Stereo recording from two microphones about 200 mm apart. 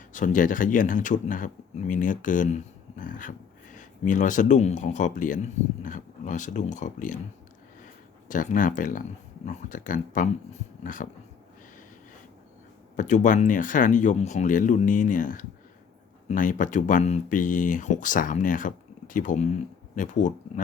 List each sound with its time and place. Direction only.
0.1 s speech: 40° left (ahead or behind)
8.3 s speech: 40° left (ahead or behind)
13.0 s speech: 40° left (ahead or behind)